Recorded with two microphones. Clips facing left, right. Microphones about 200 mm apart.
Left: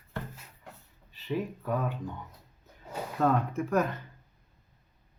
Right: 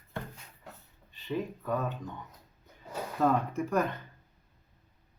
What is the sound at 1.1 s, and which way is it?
Speech, 5° left (ahead or behind).